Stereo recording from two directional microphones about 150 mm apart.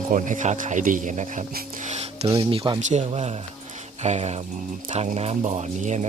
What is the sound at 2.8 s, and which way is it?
Speech, 50° right (ahead or behind).